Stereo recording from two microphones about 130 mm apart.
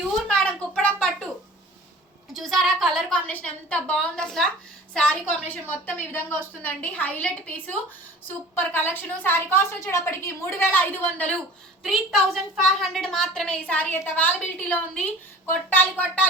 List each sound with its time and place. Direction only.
0.3 s a sound: 10° left (ahead or behind)
2.3 s a woman's voice: centre (ahead or behind)
11.8 s a woman's voice: centre (ahead or behind)